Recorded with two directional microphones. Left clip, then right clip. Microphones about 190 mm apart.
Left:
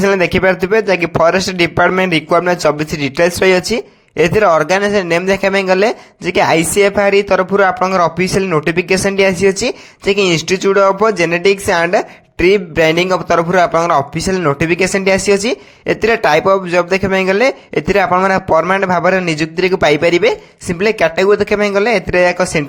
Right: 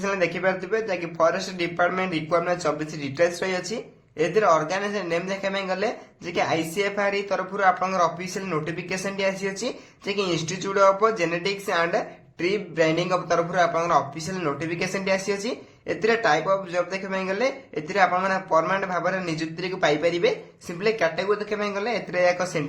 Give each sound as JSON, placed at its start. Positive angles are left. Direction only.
{"t": 0.0, "sound": "speech", "side_deg": 50}